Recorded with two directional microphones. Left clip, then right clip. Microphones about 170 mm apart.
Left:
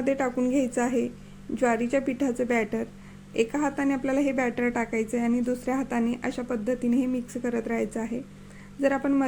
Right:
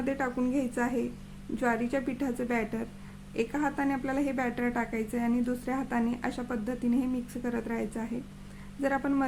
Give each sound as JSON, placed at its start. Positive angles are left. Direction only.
{"t": 0.0, "sound": "a woman's voice", "side_deg": 20}